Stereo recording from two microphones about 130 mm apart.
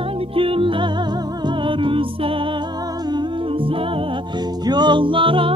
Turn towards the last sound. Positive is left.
turn(degrees=-40)  # may be behind; listen again after turning